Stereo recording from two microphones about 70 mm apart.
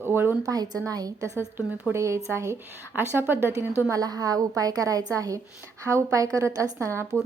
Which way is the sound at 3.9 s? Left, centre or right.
Right.